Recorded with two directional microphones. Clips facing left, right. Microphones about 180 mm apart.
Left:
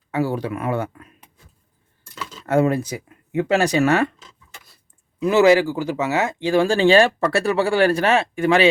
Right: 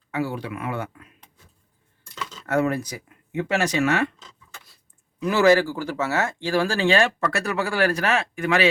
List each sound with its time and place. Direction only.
0.1 s speech: 40° left (ahead or behind)
2.5 s speech: 30° left (ahead or behind)
5.2 s speech: 20° left (ahead or behind)